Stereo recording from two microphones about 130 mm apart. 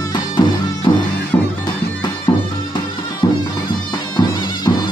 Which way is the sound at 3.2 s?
30° left (ahead or behind).